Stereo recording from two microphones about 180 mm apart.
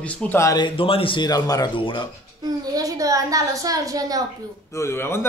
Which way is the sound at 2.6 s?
20° right (ahead or behind).